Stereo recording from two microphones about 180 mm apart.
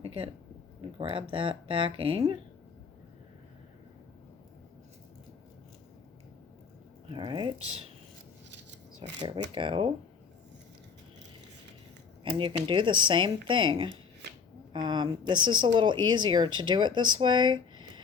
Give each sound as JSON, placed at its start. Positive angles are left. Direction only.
{"t": 0.0, "sound": "a sound", "side_deg": -30}
{"t": 0.8, "sound": "speech", "side_deg": -25}
{"t": 7.1, "sound": "speech", "side_deg": -25}
{"t": 9.0, "sound": "speech", "side_deg": -30}
{"t": 12.2, "sound": "speech", "side_deg": -30}